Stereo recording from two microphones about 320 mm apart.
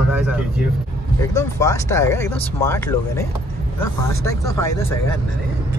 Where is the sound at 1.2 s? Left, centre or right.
Centre.